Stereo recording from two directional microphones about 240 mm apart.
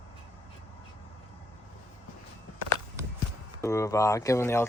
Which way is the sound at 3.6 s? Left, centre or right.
Centre.